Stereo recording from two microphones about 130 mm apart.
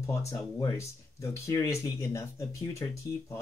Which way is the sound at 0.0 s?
25° left (ahead or behind).